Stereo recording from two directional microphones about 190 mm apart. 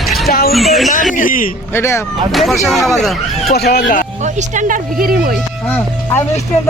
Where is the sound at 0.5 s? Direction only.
Centre (ahead or behind).